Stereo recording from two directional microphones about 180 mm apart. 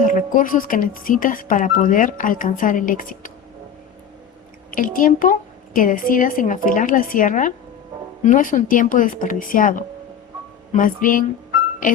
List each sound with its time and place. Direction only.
0.1 s speech: 45° left (ahead or behind)
4.7 s speech: 50° left (ahead or behind)